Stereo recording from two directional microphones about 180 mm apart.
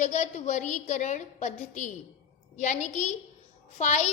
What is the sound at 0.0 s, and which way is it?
Child singing, 40° left (ahead or behind).